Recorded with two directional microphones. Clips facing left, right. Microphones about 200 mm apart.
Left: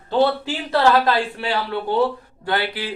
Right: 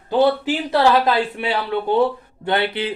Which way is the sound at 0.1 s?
15° right (ahead or behind).